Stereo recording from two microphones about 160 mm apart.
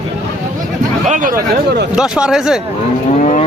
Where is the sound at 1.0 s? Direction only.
55° right (ahead or behind).